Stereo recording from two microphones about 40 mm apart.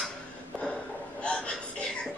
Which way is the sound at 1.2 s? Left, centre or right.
Left.